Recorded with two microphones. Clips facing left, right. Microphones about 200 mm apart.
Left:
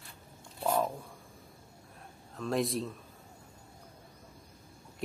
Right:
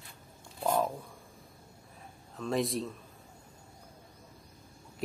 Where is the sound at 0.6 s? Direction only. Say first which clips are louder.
Right 1 dB; 5° left (ahead or behind).